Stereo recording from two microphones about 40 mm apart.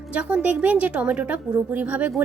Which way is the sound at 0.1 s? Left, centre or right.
Right.